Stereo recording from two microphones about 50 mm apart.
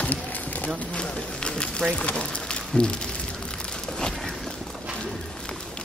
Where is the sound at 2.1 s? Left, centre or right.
Centre.